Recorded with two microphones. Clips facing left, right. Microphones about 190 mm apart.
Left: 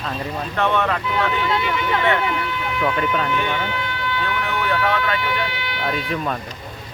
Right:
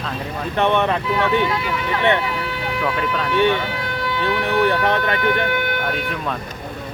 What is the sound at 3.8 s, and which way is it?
Vehicle, 40° right (ahead or behind).